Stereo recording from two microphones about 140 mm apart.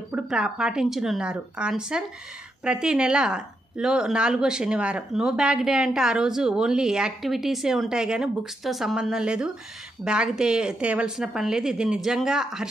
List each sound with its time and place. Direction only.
0.1 s speech: 5° right (ahead or behind)